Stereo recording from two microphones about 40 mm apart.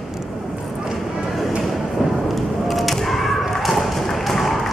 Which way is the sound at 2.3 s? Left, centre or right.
Centre.